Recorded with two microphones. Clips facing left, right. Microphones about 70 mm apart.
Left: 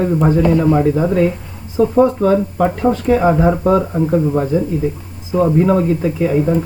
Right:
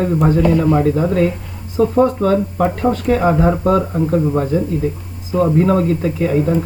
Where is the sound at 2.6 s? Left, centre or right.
Centre.